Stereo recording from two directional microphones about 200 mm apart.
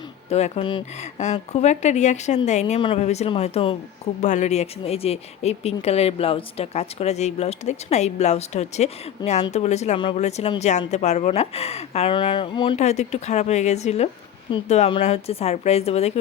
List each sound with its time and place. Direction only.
0.3 s speech: 30° left (ahead or behind)